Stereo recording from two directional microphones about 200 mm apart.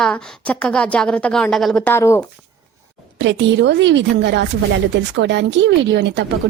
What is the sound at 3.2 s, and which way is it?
Speech, 65° right (ahead or behind).